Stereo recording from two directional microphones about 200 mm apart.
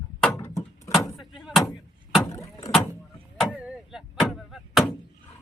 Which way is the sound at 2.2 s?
15° left (ahead or behind).